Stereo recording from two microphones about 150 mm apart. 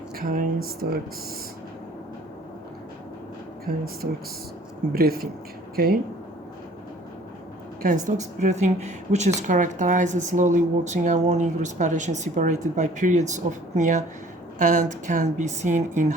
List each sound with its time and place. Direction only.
0.2 s a sound: 75° right (ahead or behind); by 1.0 s 90° right
3.7 s speech: 75° right (ahead or behind)
4.9 s speech: 80° right
8.0 s speech: 55° right (ahead or behind)